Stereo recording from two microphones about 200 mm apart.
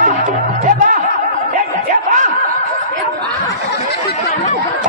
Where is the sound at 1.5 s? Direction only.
40° right (ahead or behind).